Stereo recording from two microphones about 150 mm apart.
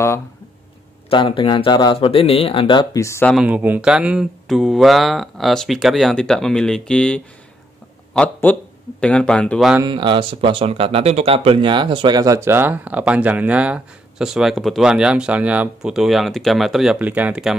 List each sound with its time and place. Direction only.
1.1 s speech: 35° left (ahead or behind); by 3.3 s 20° left (ahead or behind)
3.4 s speech: 10° right (ahead or behind); by 9.7 s 5° left (ahead or behind)
9.8 s speech: 30° right (ahead or behind); by 17.6 s 5° right (ahead or behind)